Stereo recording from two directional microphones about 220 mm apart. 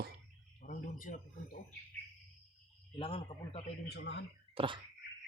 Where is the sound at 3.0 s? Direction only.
25° left (ahead or behind).